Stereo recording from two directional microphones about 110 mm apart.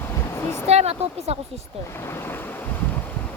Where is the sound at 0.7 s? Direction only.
70° right (ahead or behind).